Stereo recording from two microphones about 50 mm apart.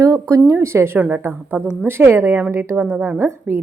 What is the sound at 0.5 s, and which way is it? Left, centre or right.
Speech, right.